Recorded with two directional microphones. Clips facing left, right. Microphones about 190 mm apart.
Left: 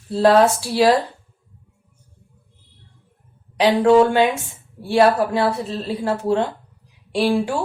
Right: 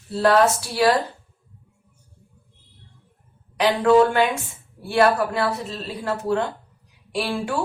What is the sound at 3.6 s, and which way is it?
Speech, 25° left (ahead or behind).